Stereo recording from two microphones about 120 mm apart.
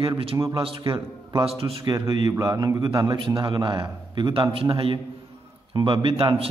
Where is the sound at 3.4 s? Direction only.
40° right (ahead or behind).